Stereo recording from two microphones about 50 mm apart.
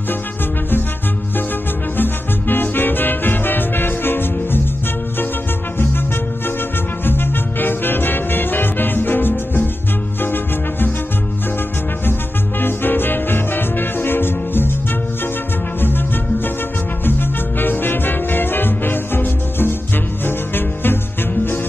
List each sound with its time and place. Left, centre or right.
2.0 s music: left
7.1 s music: left
12.5 s music: left
17.6 s music: left